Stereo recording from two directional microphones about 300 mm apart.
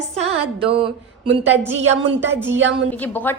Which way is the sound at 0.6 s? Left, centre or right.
Centre.